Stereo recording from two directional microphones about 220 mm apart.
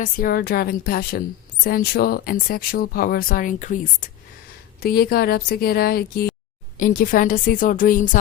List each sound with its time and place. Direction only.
0.0 s a woman's voice: 40° left (ahead or behind)